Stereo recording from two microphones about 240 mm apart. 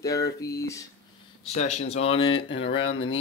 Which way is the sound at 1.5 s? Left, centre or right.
Left.